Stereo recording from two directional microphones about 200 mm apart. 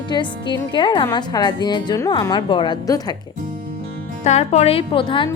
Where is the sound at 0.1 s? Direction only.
25° left (ahead or behind).